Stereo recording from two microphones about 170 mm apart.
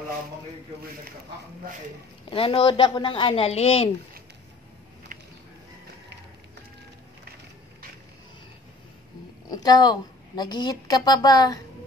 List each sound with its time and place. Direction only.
2.3 s speech: 30° left (ahead or behind)
9.5 s a woman's voice: 25° left (ahead or behind)